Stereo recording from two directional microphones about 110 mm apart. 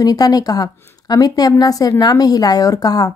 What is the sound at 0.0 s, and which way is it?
A woman's voice, 35° left (ahead or behind).